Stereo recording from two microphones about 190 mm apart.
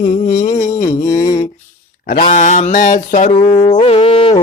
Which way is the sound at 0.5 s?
15° left (ahead or behind).